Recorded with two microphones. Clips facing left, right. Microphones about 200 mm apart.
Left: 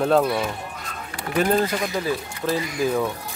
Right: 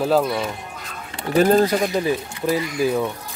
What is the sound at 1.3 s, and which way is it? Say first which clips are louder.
Speech: right 5 dB; 40° right (ahead or behind).